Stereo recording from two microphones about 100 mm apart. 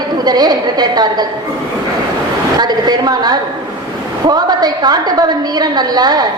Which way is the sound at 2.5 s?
45° right (ahead or behind).